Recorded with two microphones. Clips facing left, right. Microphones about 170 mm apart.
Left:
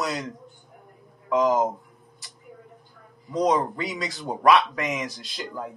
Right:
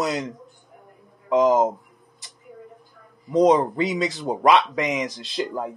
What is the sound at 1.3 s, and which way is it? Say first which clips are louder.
Speech: right 4 dB; 20° right (ahead or behind).